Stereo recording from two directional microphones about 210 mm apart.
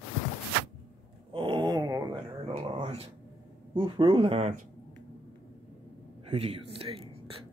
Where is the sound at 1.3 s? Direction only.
25° right (ahead or behind).